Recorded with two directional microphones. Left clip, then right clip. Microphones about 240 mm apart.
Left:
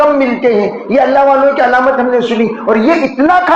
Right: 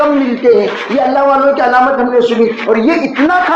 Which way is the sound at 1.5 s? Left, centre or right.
Left.